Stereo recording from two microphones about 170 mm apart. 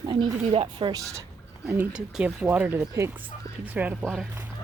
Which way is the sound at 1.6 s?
10° right (ahead or behind).